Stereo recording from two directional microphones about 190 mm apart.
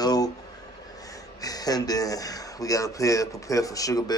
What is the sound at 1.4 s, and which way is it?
Speech, 20° left (ahead or behind).